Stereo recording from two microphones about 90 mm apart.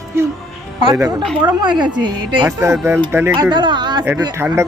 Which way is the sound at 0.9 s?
40° right (ahead or behind).